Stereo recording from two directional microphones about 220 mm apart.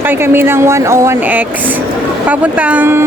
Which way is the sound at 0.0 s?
10° right (ahead or behind).